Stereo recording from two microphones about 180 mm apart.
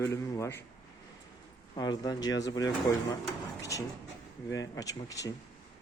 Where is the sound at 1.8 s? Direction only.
20° left (ahead or behind).